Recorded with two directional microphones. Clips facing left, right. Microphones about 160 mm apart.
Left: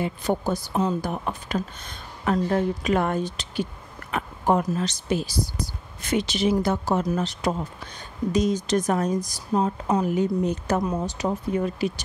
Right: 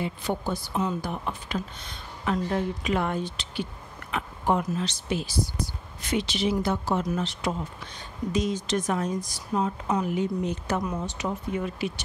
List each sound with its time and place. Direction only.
0.0 s speech: 40° left (ahead or behind)